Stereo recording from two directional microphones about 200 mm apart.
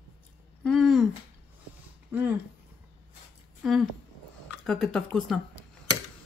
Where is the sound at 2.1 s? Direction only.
10° right (ahead or behind).